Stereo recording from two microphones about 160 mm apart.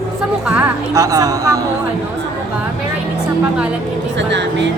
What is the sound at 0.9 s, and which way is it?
Speech, 20° right (ahead or behind).